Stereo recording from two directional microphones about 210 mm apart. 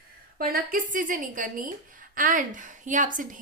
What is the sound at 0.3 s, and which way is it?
A woman's voice, 45° right (ahead or behind).